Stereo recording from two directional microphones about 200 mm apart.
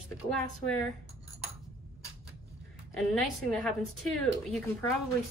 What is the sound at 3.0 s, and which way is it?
Speech, centre (ahead or behind).